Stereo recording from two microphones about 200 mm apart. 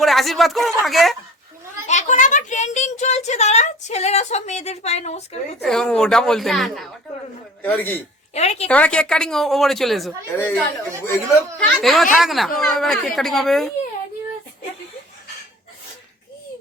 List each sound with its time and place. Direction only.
0.0 s speech: centre (ahead or behind)
1.9 s speech: 35° left (ahead or behind)
5.6 s a man's voice: 5° left (ahead or behind)
8.3 s a woman's voice: 30° left (ahead or behind)
8.6 s speech: 5° left (ahead or behind)
10.3 s speech: 10° left (ahead or behind)